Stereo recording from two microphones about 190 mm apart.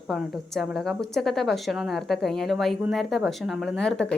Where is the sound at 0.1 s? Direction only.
Centre (ahead or behind).